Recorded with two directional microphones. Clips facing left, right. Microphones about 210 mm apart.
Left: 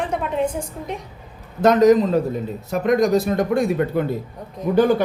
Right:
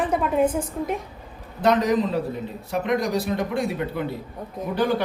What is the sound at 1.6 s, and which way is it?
A man's voice, 45° left (ahead or behind).